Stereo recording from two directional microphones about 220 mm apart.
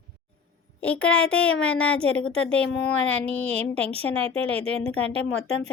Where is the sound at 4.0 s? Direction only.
25° right (ahead or behind).